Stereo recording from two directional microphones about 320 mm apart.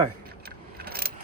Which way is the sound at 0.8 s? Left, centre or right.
Right.